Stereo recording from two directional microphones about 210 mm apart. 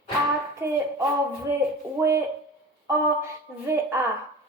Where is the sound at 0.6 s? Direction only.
10° right (ahead or behind).